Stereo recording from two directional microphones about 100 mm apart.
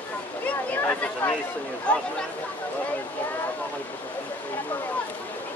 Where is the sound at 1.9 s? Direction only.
10° left (ahead or behind).